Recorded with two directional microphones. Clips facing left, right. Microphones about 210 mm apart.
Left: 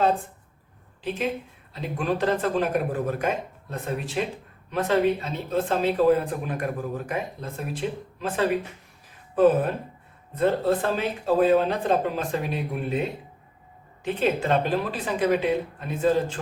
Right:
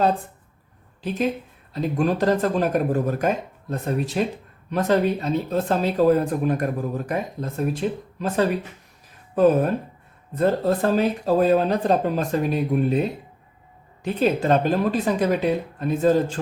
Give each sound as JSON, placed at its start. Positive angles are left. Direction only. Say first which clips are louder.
{"t": 1.7, "sound": "speech", "louder": "right 5 dB", "side_deg": -40}